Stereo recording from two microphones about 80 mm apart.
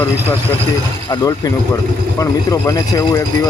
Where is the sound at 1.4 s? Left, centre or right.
Left.